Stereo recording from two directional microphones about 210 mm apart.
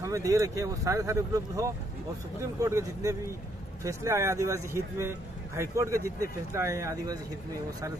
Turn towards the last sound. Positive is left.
turn(degrees=-15)  # may be behind; listen again after turning